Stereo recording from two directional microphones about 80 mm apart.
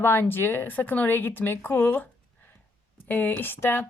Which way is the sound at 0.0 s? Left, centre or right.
Left.